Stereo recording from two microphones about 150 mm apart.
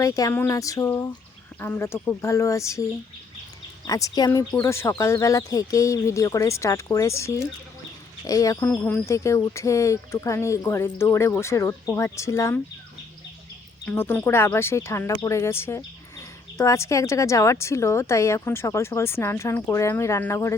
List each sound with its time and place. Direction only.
0.0 s a woman's voice: 20° left (ahead or behind)
3.8 s a woman's voice: 25° left (ahead or behind)
13.8 s a woman's voice: 15° left (ahead or behind)